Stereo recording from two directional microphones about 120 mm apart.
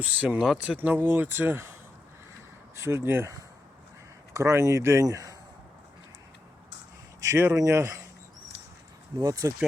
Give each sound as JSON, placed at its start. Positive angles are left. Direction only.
{"t": 0.0, "sound": "speech", "side_deg": -10}
{"t": 0.8, "sound": "speech", "side_deg": -15}
{"t": 2.7, "sound": "speech", "side_deg": -20}
{"t": 4.4, "sound": "speech", "side_deg": -25}
{"t": 7.2, "sound": "speech", "side_deg": -25}
{"t": 9.1, "sound": "speech", "side_deg": -30}